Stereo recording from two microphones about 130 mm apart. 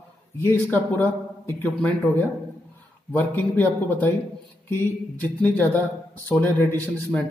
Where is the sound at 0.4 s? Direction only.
15° left (ahead or behind).